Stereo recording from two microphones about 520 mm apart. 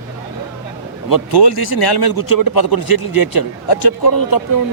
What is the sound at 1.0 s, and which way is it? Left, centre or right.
A man's voice, left.